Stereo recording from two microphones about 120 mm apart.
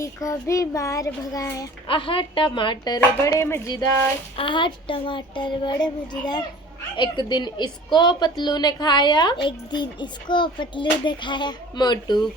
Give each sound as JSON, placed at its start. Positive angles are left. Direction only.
{"t": 0.0, "sound": "a child's voice", "side_deg": 25}
{"t": 1.9, "sound": "speech", "side_deg": 45}
{"t": 4.4, "sound": "a woman's voice", "side_deg": 45}